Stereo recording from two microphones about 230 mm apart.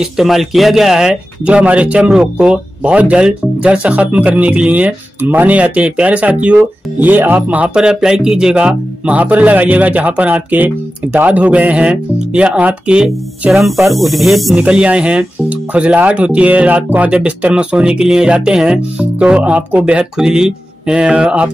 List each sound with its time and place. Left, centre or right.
0.0 s speech: centre